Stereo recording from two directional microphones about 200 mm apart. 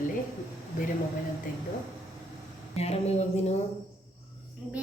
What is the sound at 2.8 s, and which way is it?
Speech, 30° left (ahead or behind).